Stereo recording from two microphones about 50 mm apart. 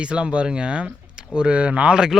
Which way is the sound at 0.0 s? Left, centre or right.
Right.